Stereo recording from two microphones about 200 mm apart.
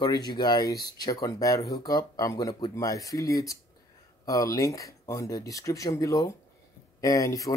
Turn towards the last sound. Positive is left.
turn(degrees=15)  # may be behind; listen again after turning